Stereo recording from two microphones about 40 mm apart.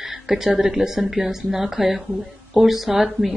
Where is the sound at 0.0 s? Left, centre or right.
Centre.